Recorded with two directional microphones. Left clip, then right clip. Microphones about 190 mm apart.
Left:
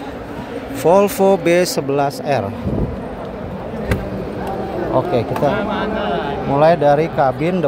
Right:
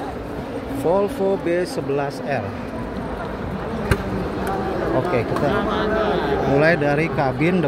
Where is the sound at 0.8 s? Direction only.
15° left (ahead or behind).